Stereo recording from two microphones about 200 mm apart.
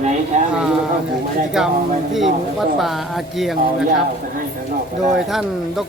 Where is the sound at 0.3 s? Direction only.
35° right (ahead or behind).